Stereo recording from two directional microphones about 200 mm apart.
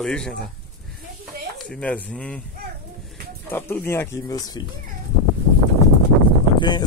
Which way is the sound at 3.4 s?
10° left (ahead or behind).